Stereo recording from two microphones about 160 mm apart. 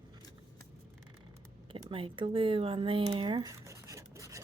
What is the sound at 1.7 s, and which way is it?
Speech, 35° right (ahead or behind).